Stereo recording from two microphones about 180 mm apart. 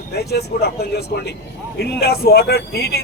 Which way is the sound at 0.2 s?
65° left (ahead or behind).